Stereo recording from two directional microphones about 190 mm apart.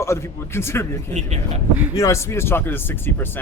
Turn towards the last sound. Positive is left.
turn(degrees=10)  # may be behind; listen again after turning